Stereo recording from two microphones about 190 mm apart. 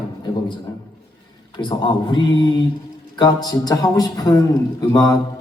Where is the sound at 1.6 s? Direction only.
20° left (ahead or behind).